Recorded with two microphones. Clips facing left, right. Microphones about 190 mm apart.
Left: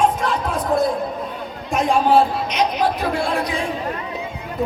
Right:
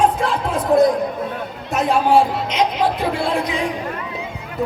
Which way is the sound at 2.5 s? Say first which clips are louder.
Right 1 dB; 25° right (ahead or behind).